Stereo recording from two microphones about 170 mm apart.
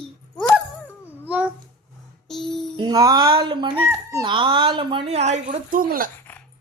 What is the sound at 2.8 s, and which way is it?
A woman's voice, 25° right (ahead or behind).